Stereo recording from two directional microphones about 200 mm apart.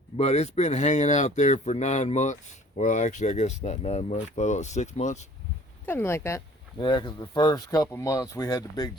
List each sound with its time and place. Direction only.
0.2 s speech: 35° left (ahead or behind)
5.8 s speech: 10° left (ahead or behind)